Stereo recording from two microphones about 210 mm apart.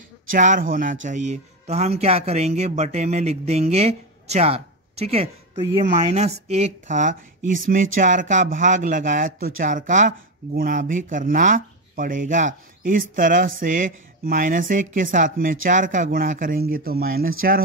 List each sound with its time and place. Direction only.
0.3 s speech: 40° right (ahead or behind)